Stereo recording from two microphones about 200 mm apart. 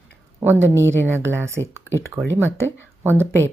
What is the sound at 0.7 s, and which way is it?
Speech, 10° left (ahead or behind).